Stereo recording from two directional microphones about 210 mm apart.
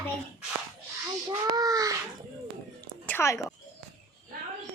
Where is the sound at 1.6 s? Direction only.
15° right (ahead or behind).